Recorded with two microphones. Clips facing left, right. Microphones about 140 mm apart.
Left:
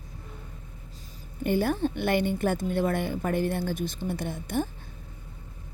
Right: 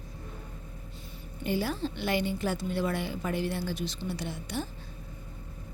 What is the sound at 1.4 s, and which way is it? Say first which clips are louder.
A woman's voice: left 5 dB; 55° left (ahead or behind).